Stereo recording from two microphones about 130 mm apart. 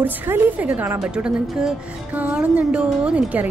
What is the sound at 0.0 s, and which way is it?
A woman's voice, 15° right (ahead or behind).